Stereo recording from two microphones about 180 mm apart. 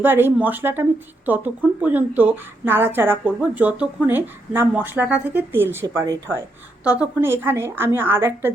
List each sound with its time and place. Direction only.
0.0 s speech: 10° right (ahead or behind)